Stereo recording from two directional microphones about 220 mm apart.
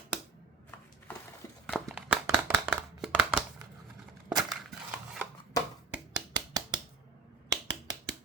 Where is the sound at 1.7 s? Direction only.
Centre (ahead or behind).